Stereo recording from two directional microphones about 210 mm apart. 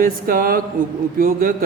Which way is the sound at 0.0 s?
40° right (ahead or behind).